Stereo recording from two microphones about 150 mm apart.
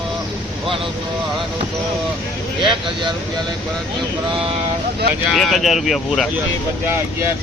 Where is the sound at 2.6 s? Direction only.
30° right (ahead or behind).